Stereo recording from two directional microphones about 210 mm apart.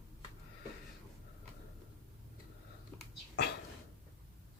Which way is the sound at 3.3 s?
50° left (ahead or behind).